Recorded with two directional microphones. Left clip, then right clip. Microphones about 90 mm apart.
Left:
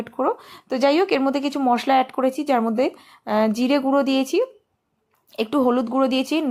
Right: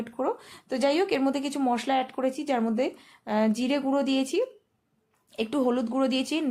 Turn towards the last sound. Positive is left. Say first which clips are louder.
# left 6 dB
turn(degrees=25)  # may be behind; listen again after turning